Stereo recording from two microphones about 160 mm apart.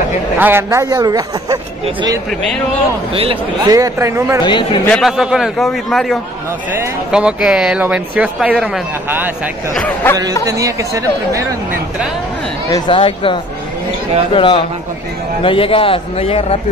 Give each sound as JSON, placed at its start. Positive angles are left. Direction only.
{"t": 0.4, "sound": "a man's voice", "side_deg": -15}
{"t": 3.6, "sound": "a man's voice", "side_deg": -20}
{"t": 4.4, "sound": "a man's voice", "side_deg": 30}
{"t": 4.9, "sound": "speech", "side_deg": 0}
{"t": 9.8, "sound": "speech", "side_deg": 10}
{"t": 10.4, "sound": "a man's voice", "side_deg": -20}
{"t": 12.7, "sound": "a man's voice", "side_deg": 30}